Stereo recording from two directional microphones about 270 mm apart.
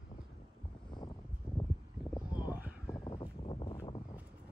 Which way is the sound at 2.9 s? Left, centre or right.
Centre.